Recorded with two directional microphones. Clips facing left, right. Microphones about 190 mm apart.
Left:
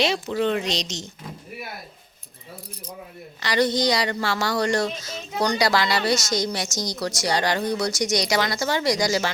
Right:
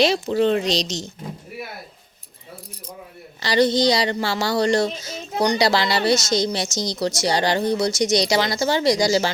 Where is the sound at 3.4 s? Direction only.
30° right (ahead or behind).